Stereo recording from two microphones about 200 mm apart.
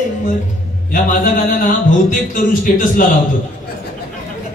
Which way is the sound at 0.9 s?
45° left (ahead or behind).